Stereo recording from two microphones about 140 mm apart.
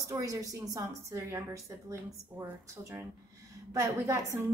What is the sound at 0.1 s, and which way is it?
A woman's voice, 25° right (ahead or behind).